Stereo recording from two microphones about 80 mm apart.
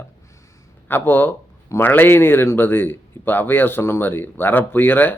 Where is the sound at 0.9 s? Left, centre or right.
Left.